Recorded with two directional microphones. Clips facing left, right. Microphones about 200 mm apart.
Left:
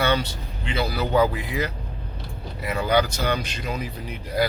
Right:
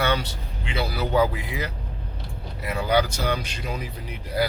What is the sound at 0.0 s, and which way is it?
A man's voice, 10° right (ahead or behind).